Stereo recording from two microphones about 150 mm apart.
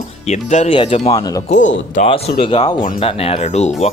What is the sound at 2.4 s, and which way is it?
Speech, 35° left (ahead or behind).